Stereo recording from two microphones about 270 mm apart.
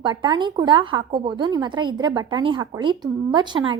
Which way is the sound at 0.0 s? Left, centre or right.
Centre.